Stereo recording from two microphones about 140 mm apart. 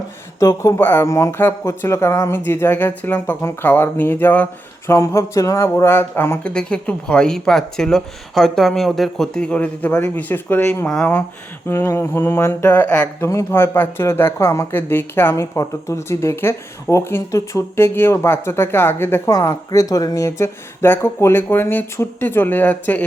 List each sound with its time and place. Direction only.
0.3 s speech: 25° left (ahead or behind)